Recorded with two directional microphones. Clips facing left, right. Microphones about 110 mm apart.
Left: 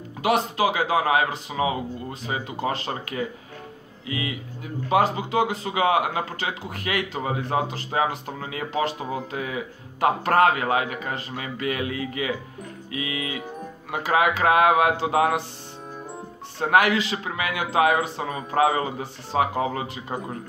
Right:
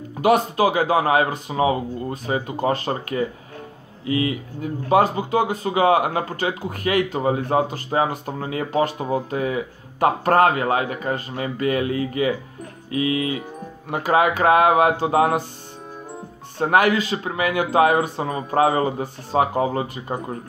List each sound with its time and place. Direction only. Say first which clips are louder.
0.2 s speech: right 5 dB; 50° right (ahead or behind)
16.5 s speech: right 2 dB; 40° right (ahead or behind)